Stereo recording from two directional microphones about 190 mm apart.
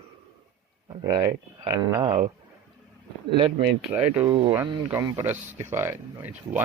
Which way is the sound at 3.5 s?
5° right (ahead or behind).